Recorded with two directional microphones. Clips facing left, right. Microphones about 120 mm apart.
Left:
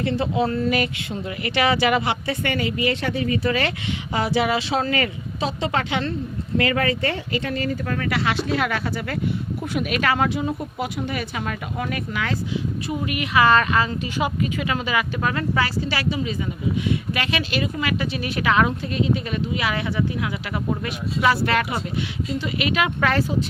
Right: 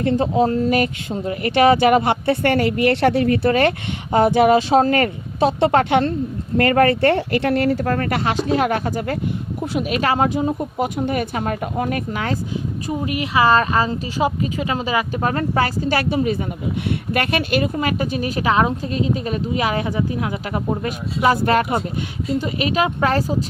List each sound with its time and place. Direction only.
0.0 s speech: 45° right (ahead or behind); by 7.9 s 70° right (ahead or behind)
7.9 s a woman's voice: 45° right (ahead or behind)
12.9 s a woman's voice: 30° right (ahead or behind)